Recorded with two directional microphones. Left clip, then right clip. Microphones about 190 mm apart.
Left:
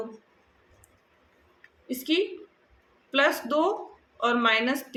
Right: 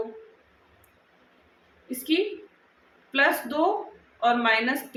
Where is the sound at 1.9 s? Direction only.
30° left (ahead or behind).